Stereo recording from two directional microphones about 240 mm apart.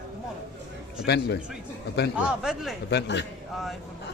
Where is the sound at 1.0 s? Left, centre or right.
Left.